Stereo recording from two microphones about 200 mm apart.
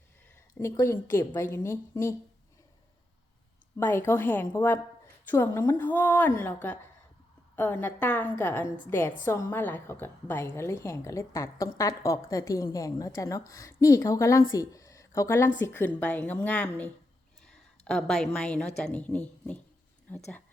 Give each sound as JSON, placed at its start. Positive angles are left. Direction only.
{"t": 0.6, "sound": "a woman's voice", "side_deg": 15}
{"t": 3.8, "sound": "a woman's voice", "side_deg": 10}
{"t": 17.4, "sound": "a sound", "side_deg": 5}
{"t": 18.3, "sound": "a woman's voice", "side_deg": 5}